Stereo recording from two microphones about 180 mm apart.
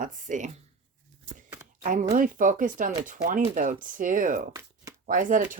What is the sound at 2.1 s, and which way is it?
Speech, 45° right (ahead or behind).